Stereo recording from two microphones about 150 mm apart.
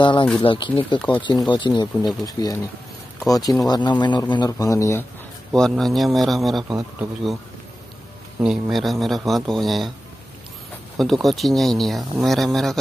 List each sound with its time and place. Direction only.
0.0 s speech: 30° left (ahead or behind)
5.5 s speech: 5° left (ahead or behind)
8.4 s speech: 5° right (ahead or behind)
11.0 s speech: centre (ahead or behind)